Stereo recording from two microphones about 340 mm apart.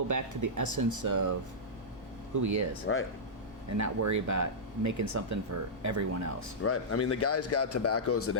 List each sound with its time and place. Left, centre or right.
0.1 s speech: right
2.3 s speech: right
2.9 s speech: left
3.8 s speech: right
6.6 s speech: left